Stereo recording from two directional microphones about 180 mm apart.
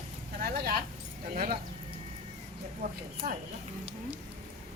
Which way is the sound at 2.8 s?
60° right (ahead or behind).